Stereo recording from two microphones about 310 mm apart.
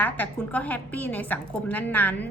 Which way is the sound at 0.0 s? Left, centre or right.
Centre.